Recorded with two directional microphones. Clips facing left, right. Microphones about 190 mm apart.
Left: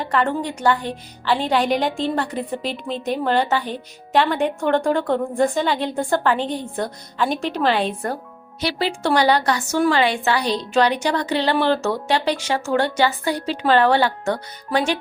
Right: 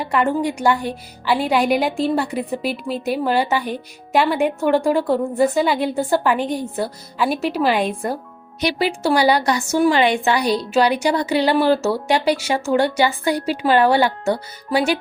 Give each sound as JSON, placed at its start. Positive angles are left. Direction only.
{"t": 0.0, "sound": "a woman's voice", "side_deg": -10}